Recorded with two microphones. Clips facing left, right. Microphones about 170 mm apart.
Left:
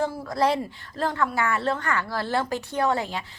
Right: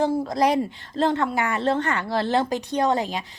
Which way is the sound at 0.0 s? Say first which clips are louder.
Right 3 dB; 20° right (ahead or behind).